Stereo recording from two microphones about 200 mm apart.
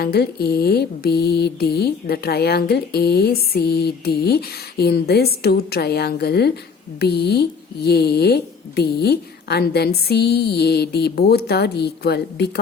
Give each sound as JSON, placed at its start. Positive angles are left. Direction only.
{"t": 0.0, "sound": "mantra", "side_deg": 50}